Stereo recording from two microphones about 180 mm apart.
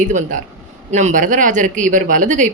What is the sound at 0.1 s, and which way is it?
Speech, 45° right (ahead or behind).